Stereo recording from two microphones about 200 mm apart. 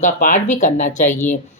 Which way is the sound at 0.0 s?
40° left (ahead or behind).